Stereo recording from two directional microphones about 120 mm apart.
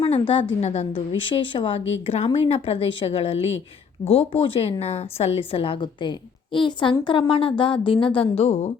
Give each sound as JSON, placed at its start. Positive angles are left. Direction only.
{"t": 0.0, "sound": "a sound", "side_deg": 45}
{"t": 0.6, "sound": "a woman's voice", "side_deg": 65}
{"t": 0.9, "sound": "speech", "side_deg": 45}